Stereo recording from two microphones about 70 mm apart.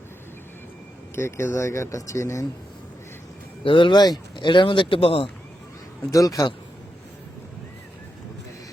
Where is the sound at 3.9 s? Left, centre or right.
Left.